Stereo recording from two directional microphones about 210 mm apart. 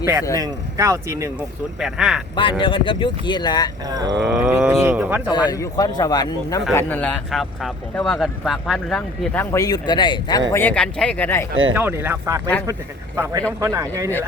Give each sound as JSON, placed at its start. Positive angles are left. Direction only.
{"t": 0.0, "sound": "speech", "side_deg": -10}
{"t": 1.8, "sound": "speech", "side_deg": 0}
{"t": 2.3, "sound": "speech", "side_deg": 25}
{"t": 3.8, "sound": "speech", "side_deg": -20}
{"t": 4.2, "sound": "speech", "side_deg": 0}
{"t": 5.5, "sound": "speech", "side_deg": 15}
{"t": 10.5, "sound": "speech", "side_deg": 10}
{"t": 11.7, "sound": "speech", "side_deg": -10}